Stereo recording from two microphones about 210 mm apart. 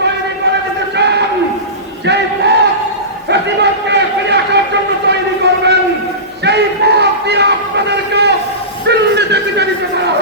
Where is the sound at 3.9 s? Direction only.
55° right (ahead or behind).